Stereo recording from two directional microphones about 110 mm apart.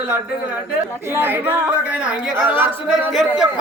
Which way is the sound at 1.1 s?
20° right (ahead or behind).